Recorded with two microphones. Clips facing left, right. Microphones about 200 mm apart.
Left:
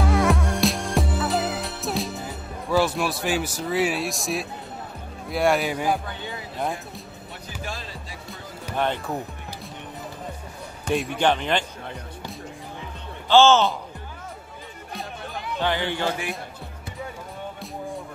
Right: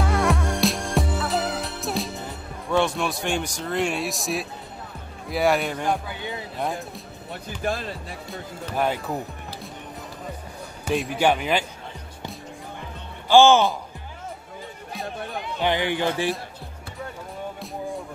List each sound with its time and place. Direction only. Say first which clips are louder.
0.0 s music: left 1 dB; centre (ahead or behind)
5.3 s a man's voice: even; centre (ahead or behind)
7.6 s speech: right 9 dB; 55° right (ahead or behind)
8.7 s a man's voice: right 1 dB; 5° right (ahead or behind)
10.9 s speech: right 1 dB; centre (ahead or behind)
13.3 s speech: right 1 dB; 15° right (ahead or behind)
15.4 s speech: right 1 dB; 15° right (ahead or behind)